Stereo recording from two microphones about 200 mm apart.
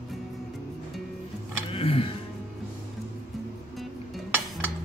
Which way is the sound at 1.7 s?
30° left (ahead or behind).